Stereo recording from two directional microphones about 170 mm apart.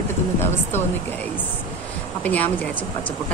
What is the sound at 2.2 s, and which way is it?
Speech, 10° left (ahead or behind).